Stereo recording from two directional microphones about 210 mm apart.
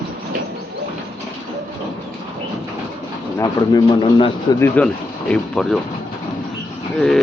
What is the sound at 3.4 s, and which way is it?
Speech, 20° left (ahead or behind).